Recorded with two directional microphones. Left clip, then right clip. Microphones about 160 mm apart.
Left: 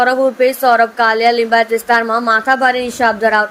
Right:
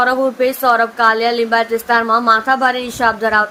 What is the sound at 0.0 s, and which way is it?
A woman's voice, 10° left (ahead or behind).